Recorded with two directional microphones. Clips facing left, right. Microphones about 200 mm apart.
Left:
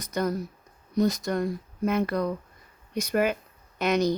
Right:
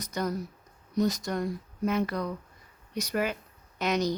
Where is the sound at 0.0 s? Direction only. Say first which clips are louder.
Left 4 dB; 55° left (ahead or behind).